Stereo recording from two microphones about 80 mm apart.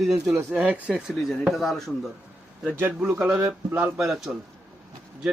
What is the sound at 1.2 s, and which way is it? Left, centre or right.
Speech, centre.